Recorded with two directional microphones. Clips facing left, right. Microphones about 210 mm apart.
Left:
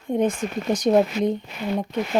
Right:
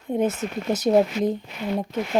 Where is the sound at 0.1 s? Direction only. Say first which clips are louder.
Left 1 dB; 5° right (ahead or behind).